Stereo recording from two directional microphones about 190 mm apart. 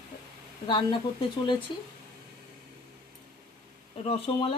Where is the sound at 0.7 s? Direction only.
25° left (ahead or behind).